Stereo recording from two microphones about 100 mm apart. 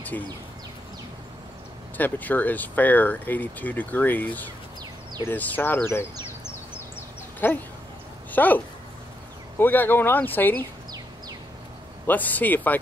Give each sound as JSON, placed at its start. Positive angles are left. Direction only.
{"t": 0.1, "sound": "speech", "side_deg": 20}
{"t": 2.0, "sound": "speech", "side_deg": 15}
{"t": 7.3, "sound": "speech", "side_deg": 20}
{"t": 12.1, "sound": "speech", "side_deg": 15}